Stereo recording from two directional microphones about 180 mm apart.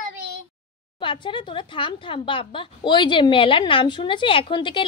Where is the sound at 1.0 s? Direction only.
25° left (ahead or behind).